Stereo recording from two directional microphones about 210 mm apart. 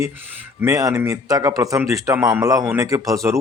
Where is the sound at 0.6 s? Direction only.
15° right (ahead or behind).